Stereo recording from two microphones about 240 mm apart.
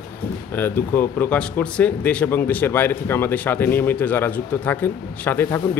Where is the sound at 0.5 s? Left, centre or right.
Centre.